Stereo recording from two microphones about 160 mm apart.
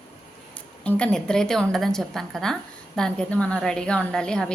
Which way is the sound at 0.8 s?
5° left (ahead or behind).